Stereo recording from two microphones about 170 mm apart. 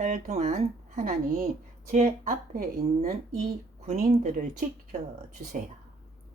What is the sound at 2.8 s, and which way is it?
Speech, 40° right (ahead or behind).